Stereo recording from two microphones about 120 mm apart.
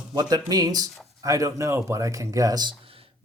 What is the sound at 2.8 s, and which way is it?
Computer keyboard, 55° right (ahead or behind).